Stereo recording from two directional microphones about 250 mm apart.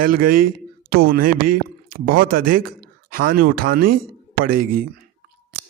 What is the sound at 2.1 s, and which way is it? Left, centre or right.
Mantra, right.